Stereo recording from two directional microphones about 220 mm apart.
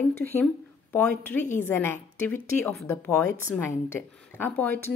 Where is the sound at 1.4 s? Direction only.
35° left (ahead or behind).